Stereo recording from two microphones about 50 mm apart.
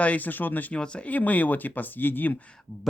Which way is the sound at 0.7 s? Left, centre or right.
Left.